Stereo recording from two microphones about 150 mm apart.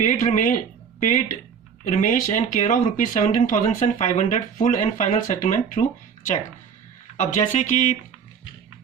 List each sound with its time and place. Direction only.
0.0 s speech: 55° left (ahead or behind)
7.2 s speech: 55° left (ahead or behind)